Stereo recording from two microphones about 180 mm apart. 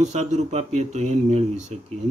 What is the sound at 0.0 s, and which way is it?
Speech, 40° right (ahead or behind).